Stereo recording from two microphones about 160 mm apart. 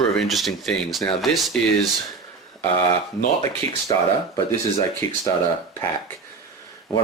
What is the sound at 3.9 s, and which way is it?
Speech, 20° left (ahead or behind).